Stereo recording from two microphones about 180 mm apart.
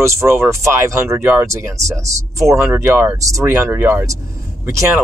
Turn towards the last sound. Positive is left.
turn(degrees=-15)  # may be behind; listen again after turning